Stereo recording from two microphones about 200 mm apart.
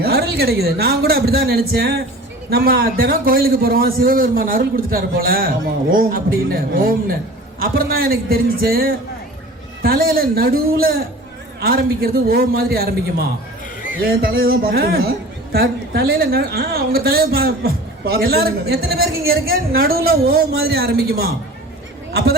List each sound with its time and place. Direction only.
0.0 s a woman's voice: 50° right (ahead or behind)